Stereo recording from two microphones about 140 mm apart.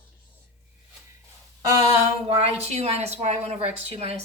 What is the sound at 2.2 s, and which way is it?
A woman's voice, 50° right (ahead or behind).